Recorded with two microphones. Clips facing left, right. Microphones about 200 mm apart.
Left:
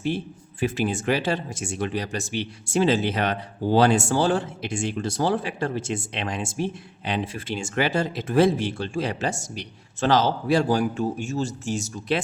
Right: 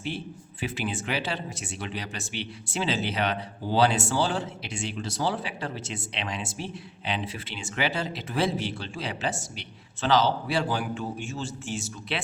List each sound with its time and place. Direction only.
0.6 s speech: 45° left (ahead or behind)